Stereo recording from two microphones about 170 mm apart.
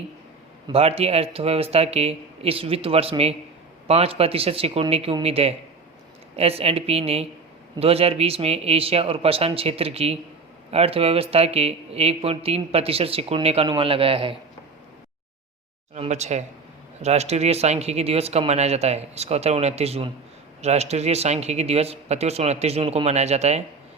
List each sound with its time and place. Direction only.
0.7 s speech: 35° right (ahead or behind)
16.0 s speech: 40° right (ahead or behind)